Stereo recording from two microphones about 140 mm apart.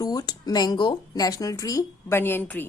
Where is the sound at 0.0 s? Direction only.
30° left (ahead or behind).